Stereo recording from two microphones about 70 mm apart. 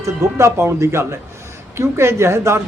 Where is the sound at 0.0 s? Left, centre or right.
Right.